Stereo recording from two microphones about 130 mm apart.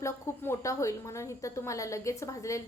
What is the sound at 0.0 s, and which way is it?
A woman's voice, 25° left (ahead or behind).